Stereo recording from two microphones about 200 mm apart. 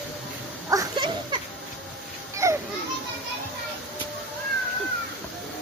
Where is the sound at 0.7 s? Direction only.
20° right (ahead or behind).